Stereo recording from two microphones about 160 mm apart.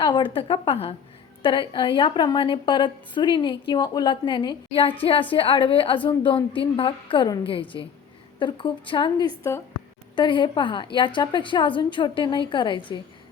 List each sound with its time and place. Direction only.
0.0 s a woman's voice: 30° left (ahead or behind)